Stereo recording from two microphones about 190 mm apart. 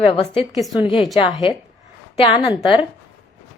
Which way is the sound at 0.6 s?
Centre (ahead or behind).